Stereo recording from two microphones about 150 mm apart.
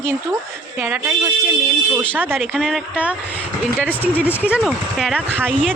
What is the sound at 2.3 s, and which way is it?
Speech, centre (ahead or behind).